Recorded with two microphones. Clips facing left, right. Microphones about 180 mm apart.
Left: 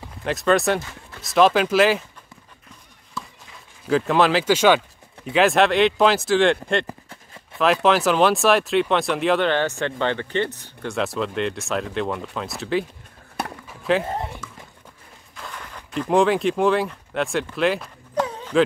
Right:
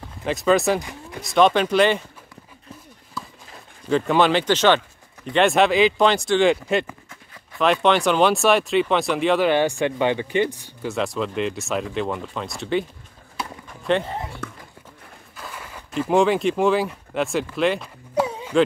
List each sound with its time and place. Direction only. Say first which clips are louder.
0.2 s speech: right 1 dB; centre (ahead or behind)
3.2 s a sound: even; centre (ahead or behind)
3.9 s speech: even; centre (ahead or behind)
9.5 s speech: right 3 dB; 15° right (ahead or behind)
13.7 s a sound: even; centre (ahead or behind)
14.4 s horse: right 7 dB; 60° right (ahead or behind)
15.3 s speech: even; 5° right (ahead or behind)
18.2 s dog: right 2 dB; 10° right (ahead or behind)